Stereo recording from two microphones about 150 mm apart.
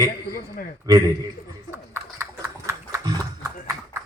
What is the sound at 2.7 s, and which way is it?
Pig, 20° right (ahead or behind).